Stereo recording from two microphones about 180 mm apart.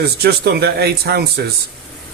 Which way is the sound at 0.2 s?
60° right (ahead or behind).